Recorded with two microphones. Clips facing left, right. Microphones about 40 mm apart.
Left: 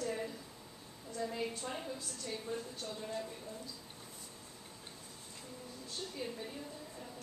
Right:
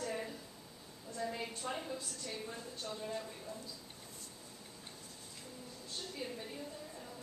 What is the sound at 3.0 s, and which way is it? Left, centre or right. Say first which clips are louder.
Speech: left 1 dB; centre.